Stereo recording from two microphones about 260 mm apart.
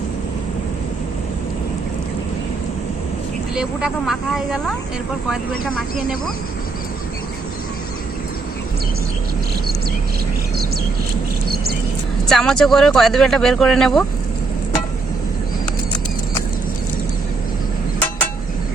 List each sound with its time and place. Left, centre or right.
3.5 s speech: centre
11.4 s a sound: right
12.3 s speech: centre